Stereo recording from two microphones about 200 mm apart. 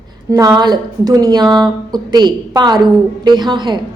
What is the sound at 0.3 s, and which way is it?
A woman's voice, 20° right (ahead or behind).